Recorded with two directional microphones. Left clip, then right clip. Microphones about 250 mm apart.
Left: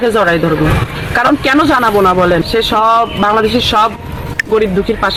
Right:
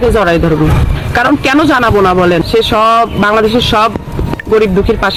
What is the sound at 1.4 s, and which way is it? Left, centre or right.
Speech, centre.